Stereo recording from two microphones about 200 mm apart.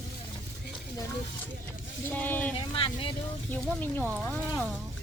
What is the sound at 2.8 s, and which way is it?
Speech, 25° left (ahead or behind).